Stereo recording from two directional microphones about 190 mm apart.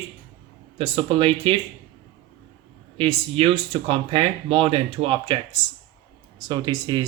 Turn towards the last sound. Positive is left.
turn(degrees=-20)  # may be behind; listen again after turning